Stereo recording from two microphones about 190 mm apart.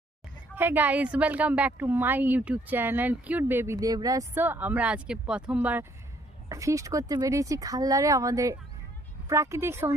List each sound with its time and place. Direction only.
0.5 s a woman's voice: 10° right (ahead or behind)